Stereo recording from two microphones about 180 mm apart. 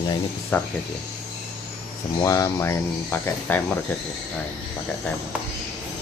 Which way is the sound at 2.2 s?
15° left (ahead or behind).